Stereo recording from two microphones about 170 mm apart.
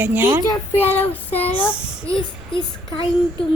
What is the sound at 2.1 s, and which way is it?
Speech, 30° left (ahead or behind).